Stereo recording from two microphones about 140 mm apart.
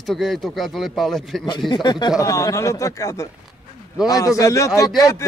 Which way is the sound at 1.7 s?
30° left (ahead or behind).